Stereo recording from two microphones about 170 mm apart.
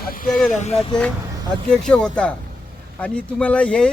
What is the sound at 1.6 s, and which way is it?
Speech, 5° left (ahead or behind).